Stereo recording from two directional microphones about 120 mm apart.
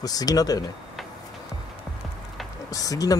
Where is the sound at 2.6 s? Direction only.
30° left (ahead or behind).